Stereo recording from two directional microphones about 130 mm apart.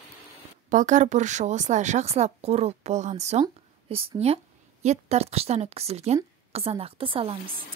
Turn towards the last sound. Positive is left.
turn(degrees=-45)  # may be behind; listen again after turning